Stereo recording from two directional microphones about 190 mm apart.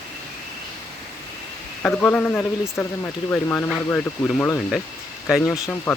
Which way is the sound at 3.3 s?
10° left (ahead or behind).